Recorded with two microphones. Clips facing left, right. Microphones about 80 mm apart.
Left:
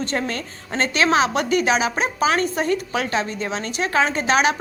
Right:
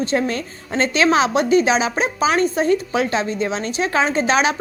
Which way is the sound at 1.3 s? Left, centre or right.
Left.